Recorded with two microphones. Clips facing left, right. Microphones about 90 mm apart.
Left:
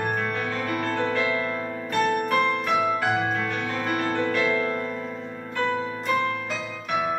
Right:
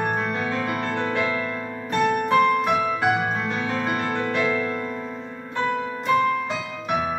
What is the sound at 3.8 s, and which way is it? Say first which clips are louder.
Music: even; 20° right (ahead or behind).